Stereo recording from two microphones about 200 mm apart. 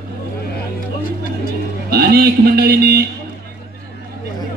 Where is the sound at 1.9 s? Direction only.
50° right (ahead or behind).